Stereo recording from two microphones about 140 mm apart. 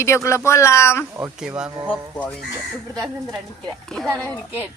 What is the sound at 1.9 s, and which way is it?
Speech, 10° left (ahead or behind).